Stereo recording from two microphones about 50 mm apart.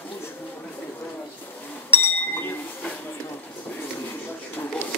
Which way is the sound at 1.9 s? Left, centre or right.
Left.